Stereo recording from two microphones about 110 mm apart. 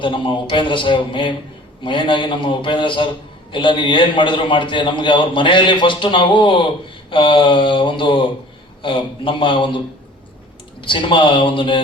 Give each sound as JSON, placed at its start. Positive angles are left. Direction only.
{"t": 0.0, "sound": "a man's voice", "side_deg": 50}